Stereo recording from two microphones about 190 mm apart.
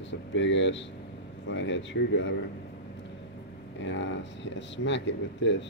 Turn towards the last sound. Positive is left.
turn(degrees=70)  # may be behind; listen again after turning